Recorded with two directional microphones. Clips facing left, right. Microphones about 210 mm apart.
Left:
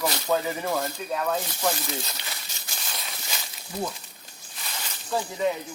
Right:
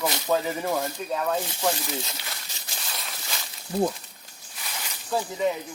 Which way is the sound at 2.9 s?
Centre (ahead or behind).